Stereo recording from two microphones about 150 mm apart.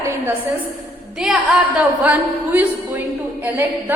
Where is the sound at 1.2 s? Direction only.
5° right (ahead or behind).